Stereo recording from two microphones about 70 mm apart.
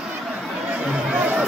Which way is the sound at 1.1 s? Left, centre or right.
Centre.